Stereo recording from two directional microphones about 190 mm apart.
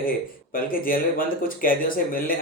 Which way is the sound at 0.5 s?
50° left (ahead or behind).